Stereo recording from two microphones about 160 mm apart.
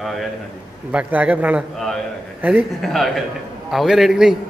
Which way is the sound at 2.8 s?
Centre (ahead or behind).